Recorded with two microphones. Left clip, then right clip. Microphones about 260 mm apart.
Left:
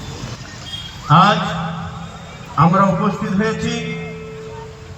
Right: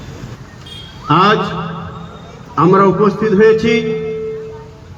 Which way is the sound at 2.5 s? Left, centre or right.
Right.